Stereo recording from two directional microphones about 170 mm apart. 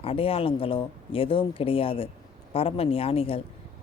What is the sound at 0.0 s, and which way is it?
Speech, 35° left (ahead or behind).